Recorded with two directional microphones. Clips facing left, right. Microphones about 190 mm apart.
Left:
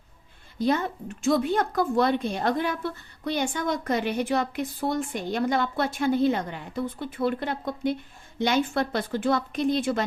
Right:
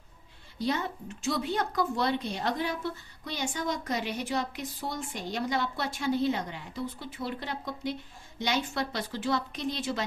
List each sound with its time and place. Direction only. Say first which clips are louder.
0.6 s a woman's voice: left 6 dB; 50° left (ahead or behind)